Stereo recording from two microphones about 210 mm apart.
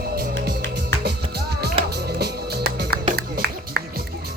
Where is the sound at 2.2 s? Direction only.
50° right (ahead or behind).